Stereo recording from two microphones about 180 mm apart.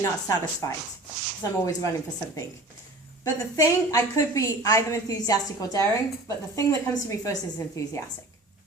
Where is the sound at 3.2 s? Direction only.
20° left (ahead or behind).